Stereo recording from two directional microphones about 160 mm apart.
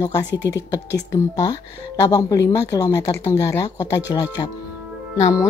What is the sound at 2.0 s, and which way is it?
Speech, 25° left (ahead or behind).